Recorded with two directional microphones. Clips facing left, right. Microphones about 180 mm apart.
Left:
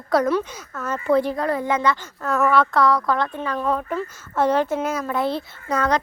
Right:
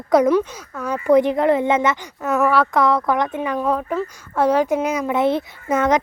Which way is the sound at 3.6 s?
5° right (ahead or behind).